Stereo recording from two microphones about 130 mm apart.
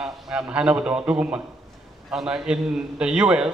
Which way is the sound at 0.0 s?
5° right (ahead or behind).